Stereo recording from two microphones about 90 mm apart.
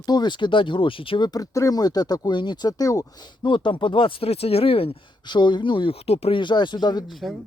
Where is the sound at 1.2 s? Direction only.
45° left (ahead or behind).